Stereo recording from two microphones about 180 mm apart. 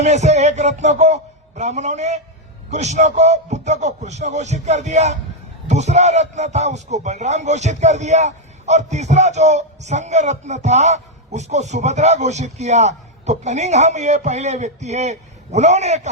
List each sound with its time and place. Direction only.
0.0 s speech: 40° right (ahead or behind)